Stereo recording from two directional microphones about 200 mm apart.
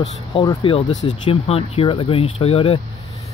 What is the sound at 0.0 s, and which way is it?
Speech, 30° left (ahead or behind).